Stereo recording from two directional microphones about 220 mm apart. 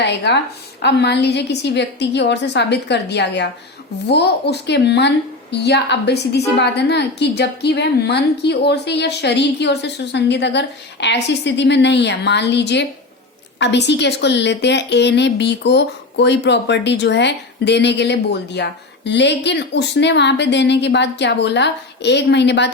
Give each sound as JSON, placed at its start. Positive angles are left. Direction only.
{"t": 0.0, "sound": "a woman's voice", "side_deg": 50}